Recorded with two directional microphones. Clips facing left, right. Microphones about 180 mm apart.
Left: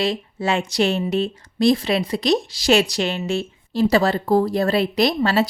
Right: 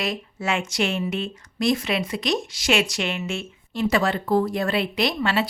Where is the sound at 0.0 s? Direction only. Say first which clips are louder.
Left 5 dB; 30° left (ahead or behind).